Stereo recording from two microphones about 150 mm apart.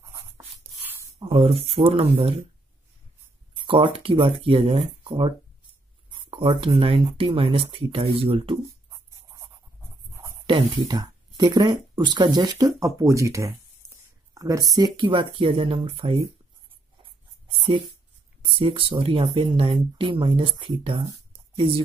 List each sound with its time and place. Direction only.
1.2 s speech: 40° right (ahead or behind)
3.6 s speech: 35° right (ahead or behind)
10.4 s speech: 30° right (ahead or behind)
18.4 s speech: 35° right (ahead or behind)